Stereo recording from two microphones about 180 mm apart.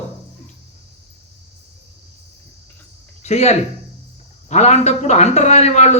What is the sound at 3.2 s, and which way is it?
A man's voice, 40° left (ahead or behind).